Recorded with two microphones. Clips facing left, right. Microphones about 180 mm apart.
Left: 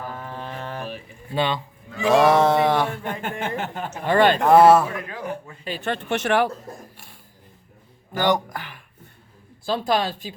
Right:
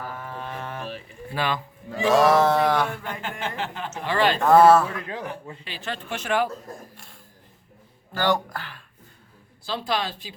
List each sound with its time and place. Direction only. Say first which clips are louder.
0.9 s a sound: left 1 dB; 25° left (ahead or behind)
3.0 s speech: left 3 dB; 55° left (ahead or behind)
4.4 s a sound: even; 25° left (ahead or behind)
5.0 s speech: left 1 dB; 25° right (ahead or behind)
5.6 s speech: left 8 dB; 50° left (ahead or behind); by 6.5 s 75° left (ahead or behind)
8.1 s speech: left 2 dB; 15° left (ahead or behind)
9.6 s speech: left 5 dB; 45° left (ahead or behind)